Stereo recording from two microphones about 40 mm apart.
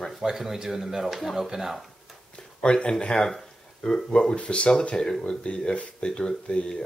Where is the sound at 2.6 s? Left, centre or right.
Left.